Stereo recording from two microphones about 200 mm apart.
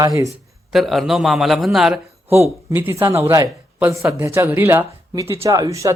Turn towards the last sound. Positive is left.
turn(degrees=-15)  # may be behind; listen again after turning